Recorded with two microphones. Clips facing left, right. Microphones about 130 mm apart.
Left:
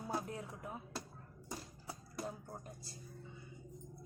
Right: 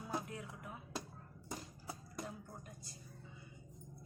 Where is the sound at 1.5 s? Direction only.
5° left (ahead or behind).